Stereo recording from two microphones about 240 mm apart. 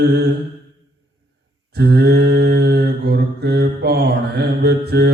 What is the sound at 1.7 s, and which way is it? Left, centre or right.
Mantra, right.